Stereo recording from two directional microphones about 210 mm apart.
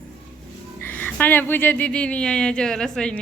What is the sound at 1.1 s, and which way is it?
Speech, 10° left (ahead or behind).